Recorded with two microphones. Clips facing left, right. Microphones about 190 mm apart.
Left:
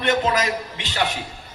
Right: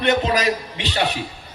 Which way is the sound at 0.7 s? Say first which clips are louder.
Right 2 dB; 65° right (ahead or behind).